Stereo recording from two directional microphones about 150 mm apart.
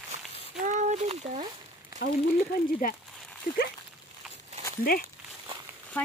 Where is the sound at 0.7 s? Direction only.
55° right (ahead or behind).